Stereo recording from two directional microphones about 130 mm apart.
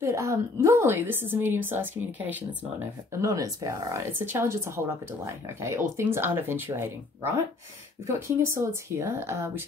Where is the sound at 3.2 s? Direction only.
25° right (ahead or behind).